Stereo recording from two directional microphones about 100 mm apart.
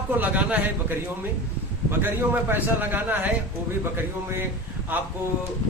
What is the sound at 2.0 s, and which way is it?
Speech, 20° right (ahead or behind).